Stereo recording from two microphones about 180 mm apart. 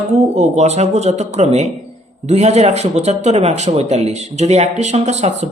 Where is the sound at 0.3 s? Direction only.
40° right (ahead or behind).